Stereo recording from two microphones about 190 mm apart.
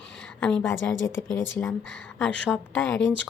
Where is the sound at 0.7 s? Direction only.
75° left (ahead or behind).